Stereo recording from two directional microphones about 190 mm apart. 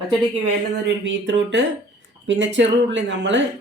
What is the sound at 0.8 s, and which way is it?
Speech, 70° right (ahead or behind).